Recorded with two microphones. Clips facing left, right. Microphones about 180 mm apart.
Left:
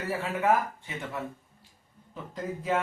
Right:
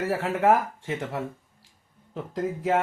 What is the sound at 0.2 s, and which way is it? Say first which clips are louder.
Speech: right 3 dB; 80° right.